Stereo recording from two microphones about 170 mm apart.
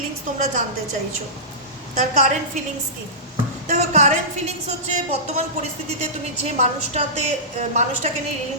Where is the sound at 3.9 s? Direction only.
40° right (ahead or behind).